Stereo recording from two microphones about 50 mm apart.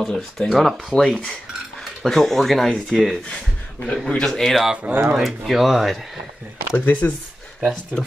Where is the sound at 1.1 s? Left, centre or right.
Centre.